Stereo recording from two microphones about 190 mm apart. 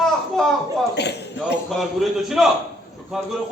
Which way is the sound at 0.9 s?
60° left (ahead or behind).